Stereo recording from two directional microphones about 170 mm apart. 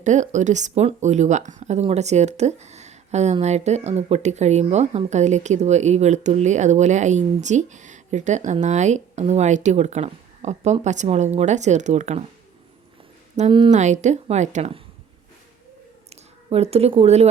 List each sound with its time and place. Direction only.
0.0 s speech: 45° right (ahead or behind)
13.7 s speech: 45° right (ahead or behind)
16.5 s speech: 35° right (ahead or behind)